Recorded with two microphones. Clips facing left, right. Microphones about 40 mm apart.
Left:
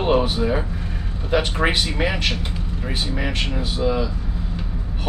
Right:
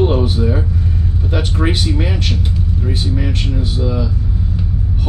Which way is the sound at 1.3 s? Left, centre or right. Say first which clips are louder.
Even; left.